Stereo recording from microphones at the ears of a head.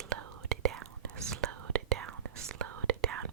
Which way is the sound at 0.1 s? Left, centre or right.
Right.